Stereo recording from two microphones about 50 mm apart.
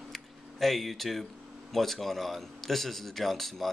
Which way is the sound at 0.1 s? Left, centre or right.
Centre.